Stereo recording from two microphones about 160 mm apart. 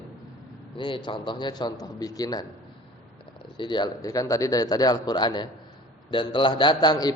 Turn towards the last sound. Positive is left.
turn(degrees=25)  # may be behind; listen again after turning